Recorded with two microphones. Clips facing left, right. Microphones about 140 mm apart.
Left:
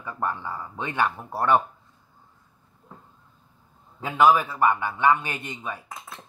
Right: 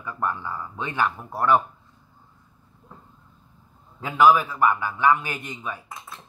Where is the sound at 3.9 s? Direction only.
25° left (ahead or behind).